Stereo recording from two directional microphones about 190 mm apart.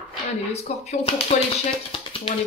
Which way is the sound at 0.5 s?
35° left (ahead or behind).